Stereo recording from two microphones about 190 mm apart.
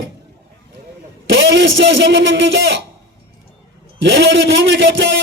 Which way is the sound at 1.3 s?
75° right (ahead or behind).